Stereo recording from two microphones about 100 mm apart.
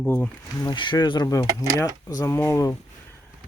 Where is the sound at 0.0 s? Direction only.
15° left (ahead or behind).